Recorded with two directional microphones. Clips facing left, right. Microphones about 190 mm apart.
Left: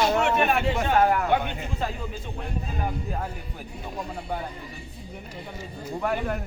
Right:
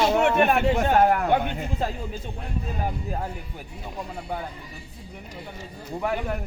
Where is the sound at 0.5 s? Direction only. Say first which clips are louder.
Right 3 dB; 50° right (ahead or behind).